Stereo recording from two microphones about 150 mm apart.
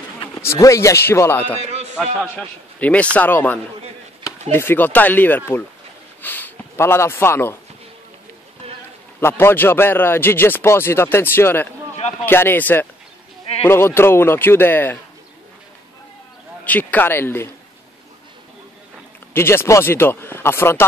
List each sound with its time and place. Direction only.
0.4 s a man's voice: 20° left (ahead or behind)
1.6 s a man's voice: 45° right (ahead or behind)
2.2 s a man's voice: 10° left (ahead or behind)
4.2 s chopping: 15° left (ahead or behind)
6.2 s speech: 15° left (ahead or behind)
8.6 s a sound: 40° right (ahead or behind)
9.2 s a man's voice: 15° left (ahead or behind)
16.6 s a man's voice: 10° left (ahead or behind)
19.3 s a man's voice: 15° left (ahead or behind)